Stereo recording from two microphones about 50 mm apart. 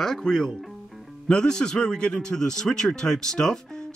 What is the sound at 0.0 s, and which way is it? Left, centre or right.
Speech, centre.